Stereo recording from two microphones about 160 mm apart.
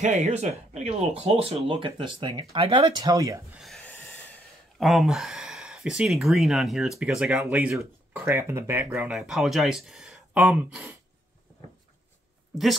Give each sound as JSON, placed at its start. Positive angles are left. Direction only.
{"t": 0.0, "sound": "speech", "side_deg": -45}
{"t": 3.5, "sound": "speech", "side_deg": 0}
{"t": 3.8, "sound": "a sound", "side_deg": 15}
{"t": 4.7, "sound": "speech", "side_deg": 0}
{"t": 8.9, "sound": "speech", "side_deg": -5}